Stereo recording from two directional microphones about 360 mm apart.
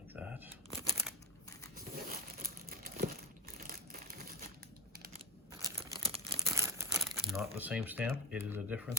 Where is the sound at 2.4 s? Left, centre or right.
Right.